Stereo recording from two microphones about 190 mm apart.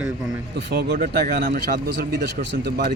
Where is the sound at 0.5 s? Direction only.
60° right (ahead or behind).